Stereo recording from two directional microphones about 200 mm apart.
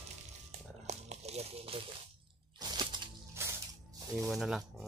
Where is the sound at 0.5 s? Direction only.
35° right (ahead or behind).